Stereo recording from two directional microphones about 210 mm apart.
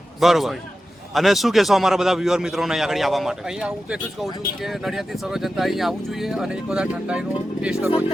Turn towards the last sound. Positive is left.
turn(degrees=-5)  # may be behind; listen again after turning